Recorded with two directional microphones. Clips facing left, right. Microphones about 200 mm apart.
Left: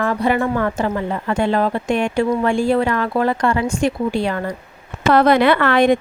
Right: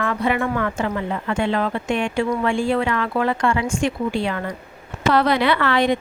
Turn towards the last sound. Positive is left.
turn(degrees=50)  # may be behind; listen again after turning